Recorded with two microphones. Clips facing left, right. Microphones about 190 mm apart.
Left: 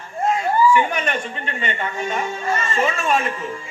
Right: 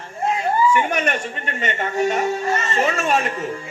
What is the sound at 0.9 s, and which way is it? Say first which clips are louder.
Speech: right 2 dB; 45° right (ahead or behind).